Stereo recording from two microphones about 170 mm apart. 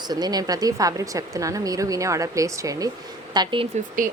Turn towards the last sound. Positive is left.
turn(degrees=-50)  # may be behind; listen again after turning